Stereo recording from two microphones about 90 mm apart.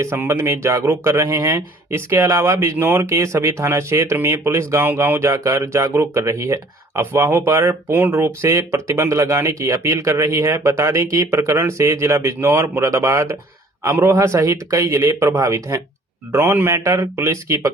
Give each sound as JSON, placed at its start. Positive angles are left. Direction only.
{"t": 0.0, "sound": "speech", "side_deg": -30}